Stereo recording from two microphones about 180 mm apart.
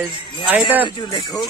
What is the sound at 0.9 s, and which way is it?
Speech, 25° left (ahead or behind).